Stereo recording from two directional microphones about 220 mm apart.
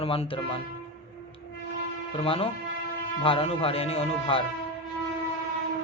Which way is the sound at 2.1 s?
25° left (ahead or behind).